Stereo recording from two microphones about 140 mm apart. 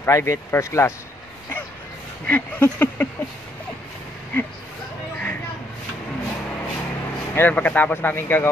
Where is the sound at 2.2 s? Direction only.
10° left (ahead or behind).